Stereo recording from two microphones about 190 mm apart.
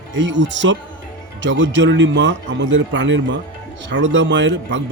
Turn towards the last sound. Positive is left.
turn(degrees=-70)  # may be behind; listen again after turning